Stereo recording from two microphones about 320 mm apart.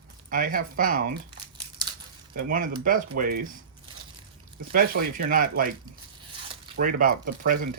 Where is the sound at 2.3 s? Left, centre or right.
Right.